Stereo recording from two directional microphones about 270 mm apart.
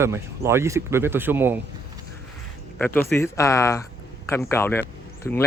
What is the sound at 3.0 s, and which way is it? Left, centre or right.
A man's voice, centre.